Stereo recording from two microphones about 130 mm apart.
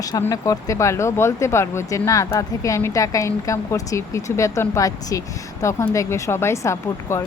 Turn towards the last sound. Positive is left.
turn(degrees=20)  # may be behind; listen again after turning